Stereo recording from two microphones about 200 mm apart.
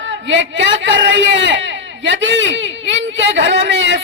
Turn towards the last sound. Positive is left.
turn(degrees=-65)  # may be behind; listen again after turning